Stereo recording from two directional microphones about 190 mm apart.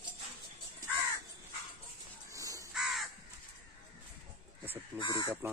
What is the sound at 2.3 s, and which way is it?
Crow, 15° right (ahead or behind).